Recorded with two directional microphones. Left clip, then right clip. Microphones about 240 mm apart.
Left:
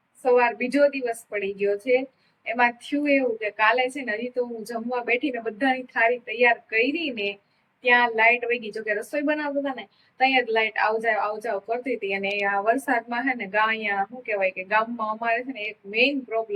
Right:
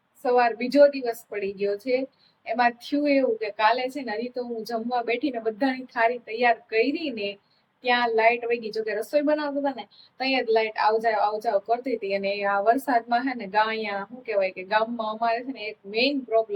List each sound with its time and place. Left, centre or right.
0.2 s a woman's voice: centre